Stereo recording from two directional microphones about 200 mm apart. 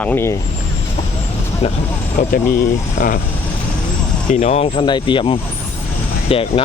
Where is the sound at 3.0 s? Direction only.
45° left (ahead or behind).